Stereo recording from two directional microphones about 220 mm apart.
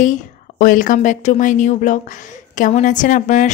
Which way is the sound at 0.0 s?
35° left (ahead or behind).